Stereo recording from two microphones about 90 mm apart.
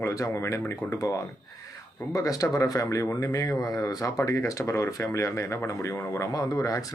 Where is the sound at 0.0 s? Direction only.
35° left (ahead or behind).